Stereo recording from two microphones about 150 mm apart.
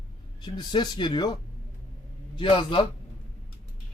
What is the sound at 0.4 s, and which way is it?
A man's voice, 30° left (ahead or behind).